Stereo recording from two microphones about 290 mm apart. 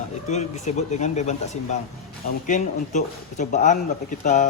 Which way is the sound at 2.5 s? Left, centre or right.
Left.